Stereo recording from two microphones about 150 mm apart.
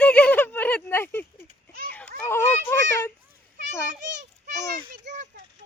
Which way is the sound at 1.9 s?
15° left (ahead or behind).